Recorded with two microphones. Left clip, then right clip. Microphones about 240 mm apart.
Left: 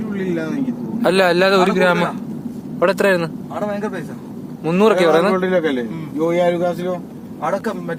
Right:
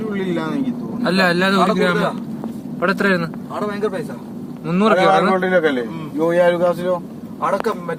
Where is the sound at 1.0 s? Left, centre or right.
Left.